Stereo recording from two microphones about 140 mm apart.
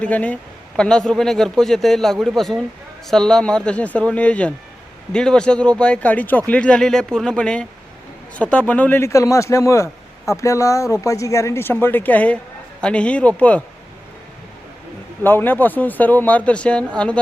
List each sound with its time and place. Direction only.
0.0 s a man's voice: 10° left (ahead or behind)
15.2 s speech: 15° left (ahead or behind)